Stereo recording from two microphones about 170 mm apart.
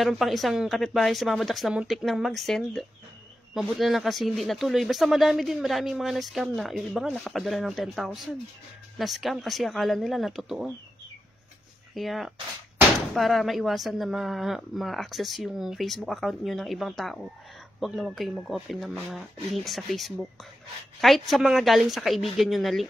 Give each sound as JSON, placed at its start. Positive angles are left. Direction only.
{"t": 0.0, "sound": "speech", "side_deg": 0}
{"t": 11.9, "sound": "speech", "side_deg": 0}